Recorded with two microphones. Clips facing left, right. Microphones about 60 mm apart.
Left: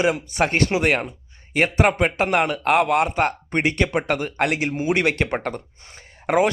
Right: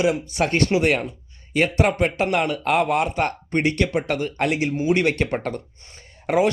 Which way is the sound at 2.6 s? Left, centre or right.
Left.